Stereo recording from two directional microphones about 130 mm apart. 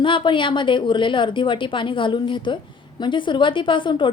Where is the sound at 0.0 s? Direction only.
40° left (ahead or behind).